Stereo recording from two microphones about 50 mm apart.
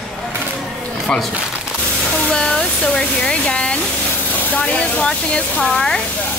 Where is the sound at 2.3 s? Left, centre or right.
Centre.